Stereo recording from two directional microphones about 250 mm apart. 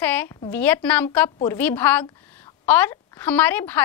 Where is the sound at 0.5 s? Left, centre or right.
Centre.